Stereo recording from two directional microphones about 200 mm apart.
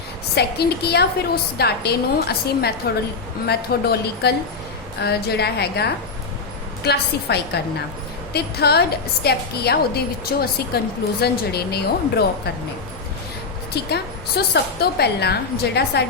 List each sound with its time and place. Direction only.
0.3 s a woman's voice: 55° left (ahead or behind)
13.7 s a woman's voice: 55° left (ahead or behind)